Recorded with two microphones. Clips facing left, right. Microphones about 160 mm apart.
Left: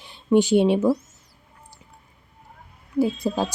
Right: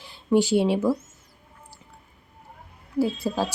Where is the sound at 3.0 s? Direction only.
20° left (ahead or behind).